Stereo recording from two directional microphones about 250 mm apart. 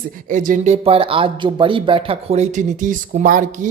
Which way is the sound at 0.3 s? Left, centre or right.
Right.